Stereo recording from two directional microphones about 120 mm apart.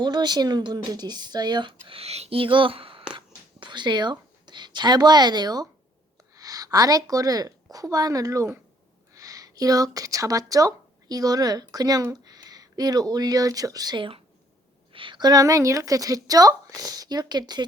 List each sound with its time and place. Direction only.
0.0 s a woman's voice: 35° right (ahead or behind)